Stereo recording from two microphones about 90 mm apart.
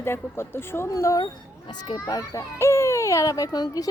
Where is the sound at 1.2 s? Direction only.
55° left (ahead or behind).